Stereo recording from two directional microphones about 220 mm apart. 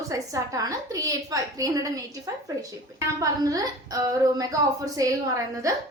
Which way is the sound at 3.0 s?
15° right (ahead or behind).